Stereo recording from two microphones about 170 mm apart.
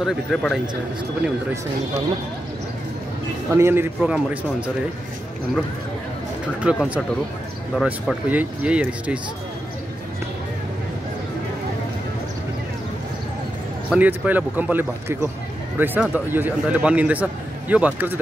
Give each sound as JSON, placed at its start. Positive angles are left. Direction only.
{"t": 0.0, "sound": "speech", "side_deg": 0}
{"t": 3.5, "sound": "speech", "side_deg": -15}
{"t": 6.6, "sound": "speech", "side_deg": -5}
{"t": 13.8, "sound": "speech", "side_deg": -10}